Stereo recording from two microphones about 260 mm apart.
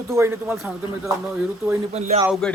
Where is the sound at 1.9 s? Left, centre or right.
Right.